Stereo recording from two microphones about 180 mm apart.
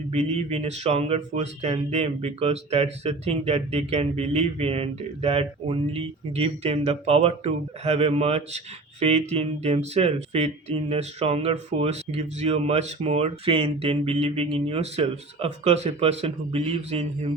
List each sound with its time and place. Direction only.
0.1 s speech: 35° right (ahead or behind)